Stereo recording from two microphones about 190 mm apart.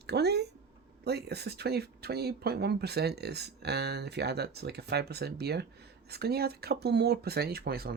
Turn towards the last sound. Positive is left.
turn(degrees=-55)  # may be behind; listen again after turning